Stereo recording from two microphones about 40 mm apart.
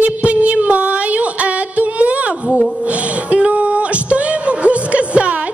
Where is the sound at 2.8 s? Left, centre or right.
Right.